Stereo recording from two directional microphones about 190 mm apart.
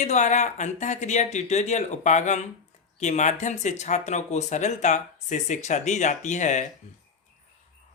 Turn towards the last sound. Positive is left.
turn(degrees=40)  # may be behind; listen again after turning